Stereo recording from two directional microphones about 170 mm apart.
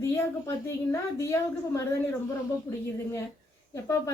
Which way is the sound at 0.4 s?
15° left (ahead or behind).